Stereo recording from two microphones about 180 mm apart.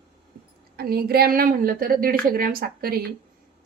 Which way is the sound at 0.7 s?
60° right (ahead or behind).